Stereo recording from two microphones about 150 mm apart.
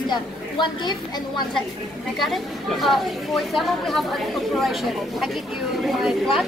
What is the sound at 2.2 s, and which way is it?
Speech, centre (ahead or behind).